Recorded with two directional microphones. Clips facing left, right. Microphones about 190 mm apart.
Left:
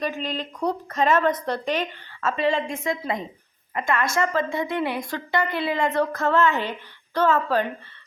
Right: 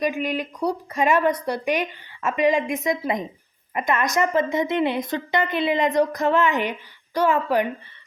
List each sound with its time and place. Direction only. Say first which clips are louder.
0.0 s a woman's voice: right 4 dB; 10° right (ahead or behind)